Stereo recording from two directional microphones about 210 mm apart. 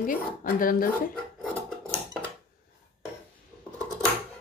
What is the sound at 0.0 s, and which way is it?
A woman's voice, 40° left (ahead or behind).